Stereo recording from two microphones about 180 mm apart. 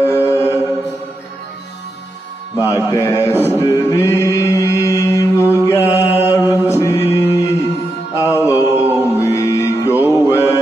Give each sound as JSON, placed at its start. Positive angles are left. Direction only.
{"t": 0.0, "sound": "music", "side_deg": 15}
{"t": 2.9, "sound": "chant", "side_deg": 15}
{"t": 4.8, "sound": "mantra", "side_deg": 15}
{"t": 6.4, "sound": "mantra", "side_deg": -15}
{"t": 6.8, "sound": "chant", "side_deg": 15}
{"t": 7.2, "sound": "music", "side_deg": 15}
{"t": 8.6, "sound": "music", "side_deg": -10}
{"t": 9.2, "sound": "music", "side_deg": 20}
{"t": 9.9, "sound": "music", "side_deg": -10}
{"t": 10.2, "sound": "mantra", "side_deg": 15}